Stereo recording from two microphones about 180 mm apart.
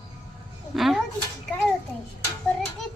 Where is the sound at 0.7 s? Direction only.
Centre (ahead or behind).